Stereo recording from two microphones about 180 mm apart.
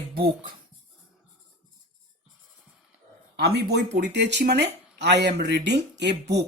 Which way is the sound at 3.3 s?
65° right (ahead or behind).